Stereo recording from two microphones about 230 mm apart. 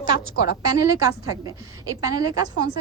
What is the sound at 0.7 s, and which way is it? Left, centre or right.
A woman's voice, centre.